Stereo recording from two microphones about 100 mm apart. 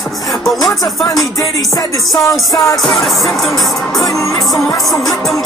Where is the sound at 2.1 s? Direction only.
35° left (ahead or behind).